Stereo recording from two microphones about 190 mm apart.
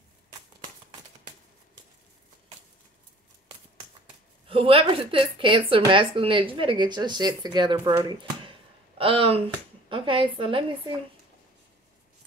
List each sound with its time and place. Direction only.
4.5 s speech: 30° right (ahead or behind)